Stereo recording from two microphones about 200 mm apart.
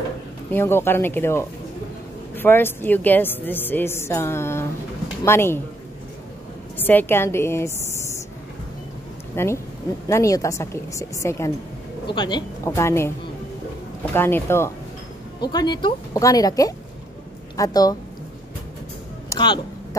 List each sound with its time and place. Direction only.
0.5 s a woman's voice: 10° left (ahead or behind)
6.8 s a woman's voice: 10° left (ahead or behind)
9.3 s a woman's voice: 10° left (ahead or behind)
14.1 s a woman's voice: 10° left (ahead or behind)
19.2 s a sound: 20° left (ahead or behind)